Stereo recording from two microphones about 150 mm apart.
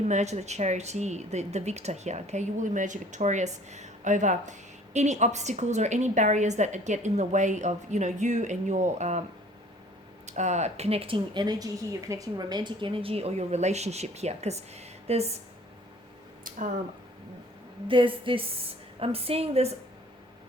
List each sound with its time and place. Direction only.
0.1 s speech: 50° right (ahead or behind)
10.2 s speech: 50° right (ahead or behind)
17.8 s a woman's voice: 35° right (ahead or behind)